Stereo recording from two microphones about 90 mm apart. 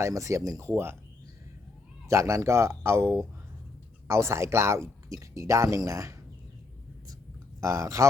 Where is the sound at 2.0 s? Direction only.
35° right (ahead or behind).